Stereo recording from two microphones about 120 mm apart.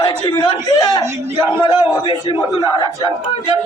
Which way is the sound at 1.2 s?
20° right (ahead or behind).